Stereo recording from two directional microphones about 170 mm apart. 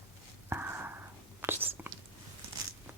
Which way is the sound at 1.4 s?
15° right (ahead or behind).